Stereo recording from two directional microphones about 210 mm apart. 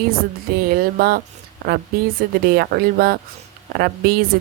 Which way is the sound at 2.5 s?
45° right (ahead or behind).